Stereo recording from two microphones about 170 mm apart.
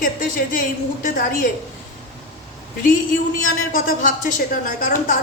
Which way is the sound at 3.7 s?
50° left (ahead or behind).